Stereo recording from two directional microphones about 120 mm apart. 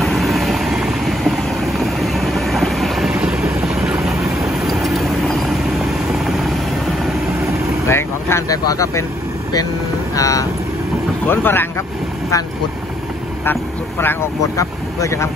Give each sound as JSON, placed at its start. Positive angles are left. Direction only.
{"t": 0.0, "sound": "vehicle", "side_deg": 0}
{"t": 7.9, "sound": "vehicle", "side_deg": 20}
{"t": 10.1, "sound": "speech", "side_deg": 30}
{"t": 11.2, "sound": "speech", "side_deg": 15}
{"t": 13.5, "sound": "speech", "side_deg": 20}